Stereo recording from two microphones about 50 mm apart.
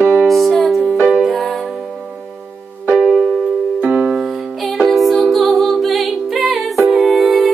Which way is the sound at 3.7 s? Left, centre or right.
Right.